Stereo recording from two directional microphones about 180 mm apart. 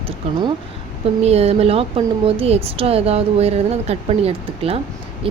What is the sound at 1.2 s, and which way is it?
Speech, 35° right (ahead or behind).